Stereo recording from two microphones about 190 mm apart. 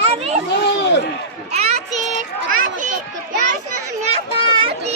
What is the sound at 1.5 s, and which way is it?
Children playing, 35° right (ahead or behind).